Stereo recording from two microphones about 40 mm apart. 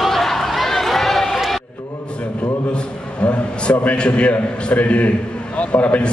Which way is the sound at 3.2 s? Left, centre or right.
Left.